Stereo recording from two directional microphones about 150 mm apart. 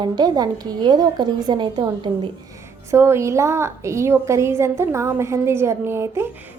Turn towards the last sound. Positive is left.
turn(degrees=-15)  # may be behind; listen again after turning